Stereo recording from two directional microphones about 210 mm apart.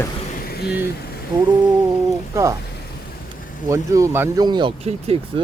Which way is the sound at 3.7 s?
15° right (ahead or behind).